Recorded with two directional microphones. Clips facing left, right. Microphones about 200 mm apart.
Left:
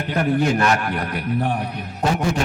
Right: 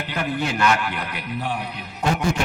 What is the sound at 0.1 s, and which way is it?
A man's voice, 45° left (ahead or behind).